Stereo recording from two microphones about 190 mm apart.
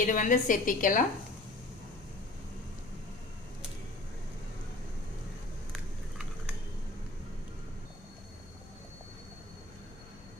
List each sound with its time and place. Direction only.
0.0 s a woman's voice: 45° left (ahead or behind)